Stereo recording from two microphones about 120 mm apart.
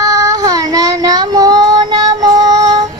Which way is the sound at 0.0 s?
25° right (ahead or behind).